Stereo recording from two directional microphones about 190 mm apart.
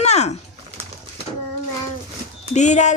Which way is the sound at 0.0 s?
35° left (ahead or behind).